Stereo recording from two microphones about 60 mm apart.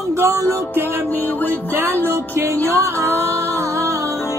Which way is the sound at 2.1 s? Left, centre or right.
Right.